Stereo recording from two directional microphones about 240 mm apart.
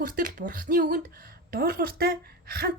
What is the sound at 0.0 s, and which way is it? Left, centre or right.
Speech, right.